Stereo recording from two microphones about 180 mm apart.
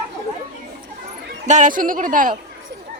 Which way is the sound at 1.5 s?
45° right (ahead or behind).